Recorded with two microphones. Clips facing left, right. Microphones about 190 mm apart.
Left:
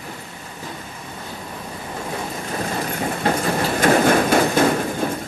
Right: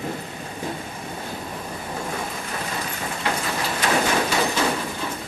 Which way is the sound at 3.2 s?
50° left (ahead or behind).